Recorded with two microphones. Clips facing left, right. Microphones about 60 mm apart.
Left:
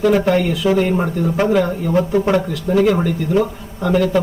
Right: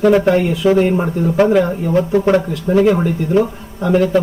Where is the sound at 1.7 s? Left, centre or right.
Right.